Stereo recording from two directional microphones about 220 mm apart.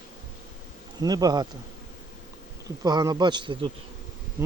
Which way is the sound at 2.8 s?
15° right (ahead or behind).